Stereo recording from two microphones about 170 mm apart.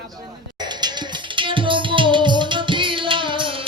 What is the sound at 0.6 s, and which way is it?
Music, 25° right (ahead or behind).